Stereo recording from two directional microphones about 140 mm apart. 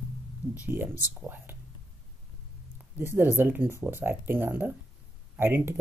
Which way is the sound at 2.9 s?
15° right (ahead or behind).